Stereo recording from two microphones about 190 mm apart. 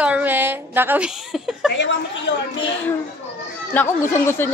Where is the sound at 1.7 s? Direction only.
70° left (ahead or behind).